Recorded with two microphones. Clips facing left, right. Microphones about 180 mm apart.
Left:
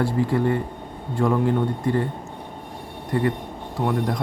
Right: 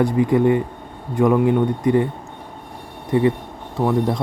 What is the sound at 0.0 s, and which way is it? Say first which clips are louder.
Speech: right 5 dB; 20° right (ahead or behind).